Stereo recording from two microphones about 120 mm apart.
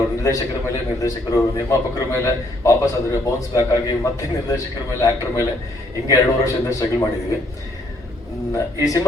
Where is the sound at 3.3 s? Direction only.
30° left (ahead or behind).